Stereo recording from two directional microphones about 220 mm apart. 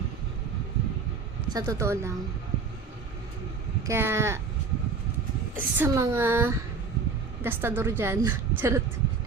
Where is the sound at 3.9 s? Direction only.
10° right (ahead or behind).